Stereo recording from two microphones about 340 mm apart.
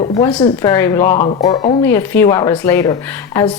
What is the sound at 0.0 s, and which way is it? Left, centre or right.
A woman's voice, centre.